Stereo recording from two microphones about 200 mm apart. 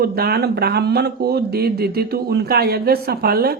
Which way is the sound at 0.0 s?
50° right (ahead or behind).